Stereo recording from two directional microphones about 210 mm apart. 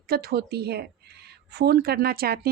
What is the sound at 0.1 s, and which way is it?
Speech, 50° right (ahead or behind).